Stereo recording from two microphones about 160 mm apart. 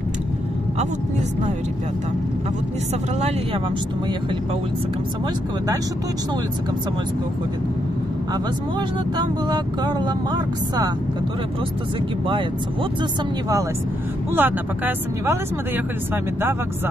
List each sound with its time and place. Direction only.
3.2 s speech: 40° right (ahead or behind)
8.7 s speech: 25° right (ahead or behind)
14.3 s speech: 10° right (ahead or behind)